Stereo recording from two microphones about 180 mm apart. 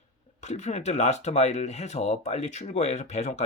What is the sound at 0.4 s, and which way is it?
Speech, 40° left (ahead or behind).